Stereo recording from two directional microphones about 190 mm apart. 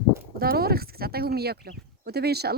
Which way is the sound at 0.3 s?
55° right (ahead or behind).